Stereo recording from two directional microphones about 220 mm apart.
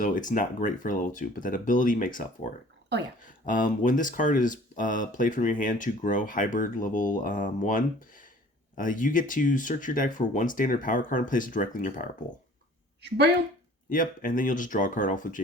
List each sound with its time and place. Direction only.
0.0 s speech: 35° left (ahead or behind)
13.0 s a woman's voice: 50° right (ahead or behind)
13.9 s speech: 40° left (ahead or behind)